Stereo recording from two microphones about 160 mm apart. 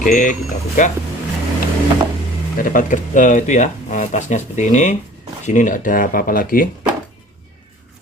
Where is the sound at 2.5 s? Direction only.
60° left (ahead or behind).